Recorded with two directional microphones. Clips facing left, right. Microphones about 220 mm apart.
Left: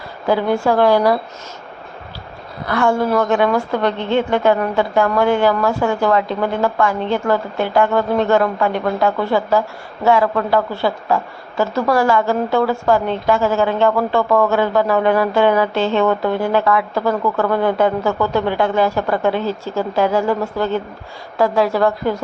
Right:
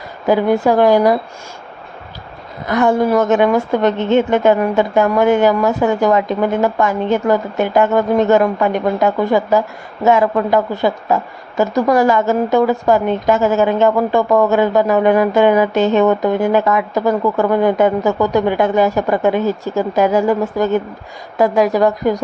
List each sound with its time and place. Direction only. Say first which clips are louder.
0.3 s a woman's voice: right 3 dB; 15° right (ahead or behind)
2.6 s a woman's voice: right 3 dB; 20° right (ahead or behind)